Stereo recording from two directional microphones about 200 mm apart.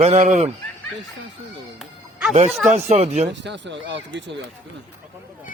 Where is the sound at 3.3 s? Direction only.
60° right (ahead or behind).